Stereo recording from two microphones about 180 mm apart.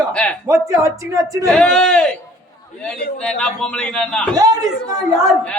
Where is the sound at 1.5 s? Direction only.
5° left (ahead or behind).